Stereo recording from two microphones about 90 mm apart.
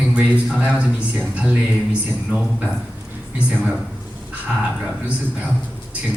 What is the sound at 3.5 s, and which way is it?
Speech, 15° right (ahead or behind).